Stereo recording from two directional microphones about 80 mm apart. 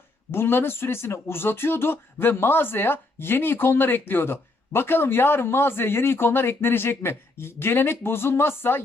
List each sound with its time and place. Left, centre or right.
0.3 s speech: left